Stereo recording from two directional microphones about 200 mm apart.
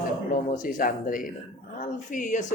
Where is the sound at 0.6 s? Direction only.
45° left (ahead or behind).